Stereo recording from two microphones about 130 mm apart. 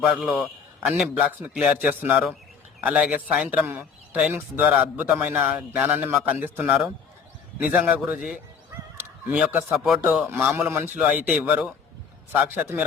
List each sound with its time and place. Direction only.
0.1 s a man's voice: centre (ahead or behind)
9.7 s a man's voice: centre (ahead or behind)
10.2 s a man's voice: 15° right (ahead or behind)